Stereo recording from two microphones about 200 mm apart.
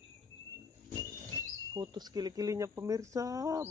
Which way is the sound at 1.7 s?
20° right (ahead or behind).